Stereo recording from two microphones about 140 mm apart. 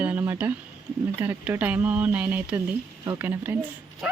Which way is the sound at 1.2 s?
10° right (ahead or behind).